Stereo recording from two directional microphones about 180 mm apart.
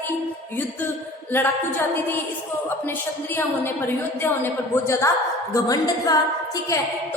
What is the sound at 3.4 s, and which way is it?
A woman's voice, 10° left (ahead or behind).